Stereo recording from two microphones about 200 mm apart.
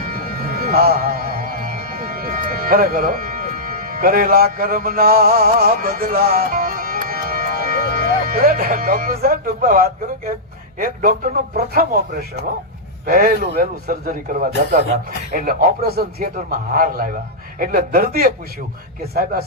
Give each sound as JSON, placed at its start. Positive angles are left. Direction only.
{"t": 0.0, "sound": "music", "side_deg": -45}
{"t": 10.8, "sound": "a man's voice", "side_deg": -45}
{"t": 13.1, "sound": "a man's voice", "side_deg": -45}